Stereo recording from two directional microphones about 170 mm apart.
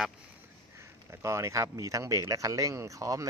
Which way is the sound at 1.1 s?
15° right (ahead or behind).